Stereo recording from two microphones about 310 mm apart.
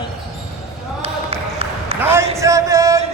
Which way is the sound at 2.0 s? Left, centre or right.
Centre.